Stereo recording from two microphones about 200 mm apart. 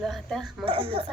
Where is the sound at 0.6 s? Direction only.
25° right (ahead or behind).